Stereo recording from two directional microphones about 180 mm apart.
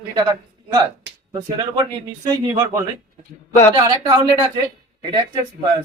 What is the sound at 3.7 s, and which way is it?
Speech, 25° right (ahead or behind).